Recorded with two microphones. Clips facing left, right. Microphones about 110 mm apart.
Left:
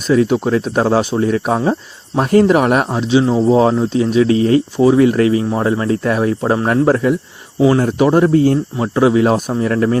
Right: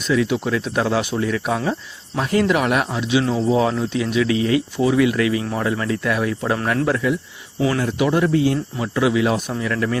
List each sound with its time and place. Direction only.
0.1 s speech: 40° left (ahead or behind)
3.1 s speech: 25° left (ahead or behind)
3.5 s speech: 35° left (ahead or behind)